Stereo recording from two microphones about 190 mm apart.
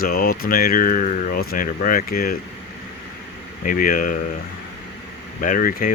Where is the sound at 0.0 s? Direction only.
50° left (ahead or behind).